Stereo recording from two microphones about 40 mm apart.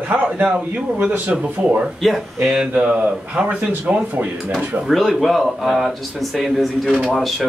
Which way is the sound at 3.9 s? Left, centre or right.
Right.